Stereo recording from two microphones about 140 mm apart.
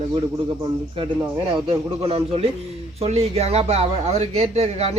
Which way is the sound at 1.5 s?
40° right (ahead or behind).